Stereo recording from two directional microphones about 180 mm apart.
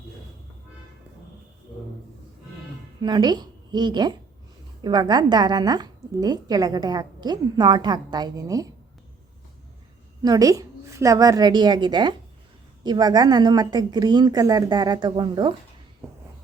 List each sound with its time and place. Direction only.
3.0 s a woman's voice: 25° right (ahead or behind)
10.2 s a woman's voice: 20° right (ahead or behind)